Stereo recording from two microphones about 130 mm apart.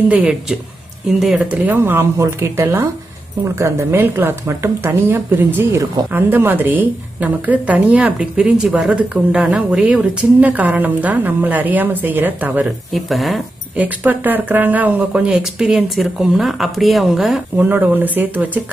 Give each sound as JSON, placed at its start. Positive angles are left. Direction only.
{"t": 0.1, "sound": "a woman's voice", "side_deg": -5}
{"t": 12.9, "sound": "speech", "side_deg": 0}
{"t": 13.7, "sound": "speech", "side_deg": -15}
{"t": 17.6, "sound": "a woman's voice", "side_deg": -15}